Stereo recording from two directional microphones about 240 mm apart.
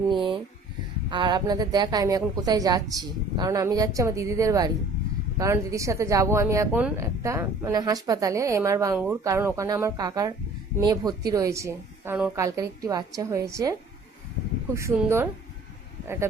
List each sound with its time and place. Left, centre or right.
0.1 s speech: centre
14.8 s speech: centre